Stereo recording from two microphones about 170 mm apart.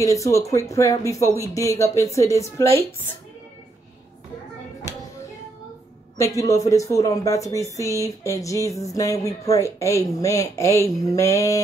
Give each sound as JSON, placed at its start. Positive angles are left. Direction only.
{"t": 0.0, "sound": "a woman's voice", "side_deg": 20}
{"t": 6.1, "sound": "a woman's voice", "side_deg": 20}